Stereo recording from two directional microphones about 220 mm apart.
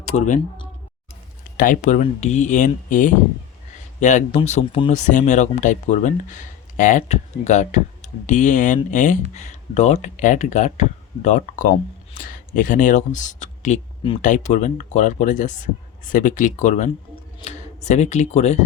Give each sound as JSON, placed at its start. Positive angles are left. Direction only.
{"t": 1.5, "sound": "speech", "side_deg": 40}